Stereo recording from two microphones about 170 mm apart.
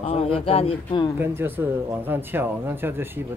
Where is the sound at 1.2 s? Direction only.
15° right (ahead or behind).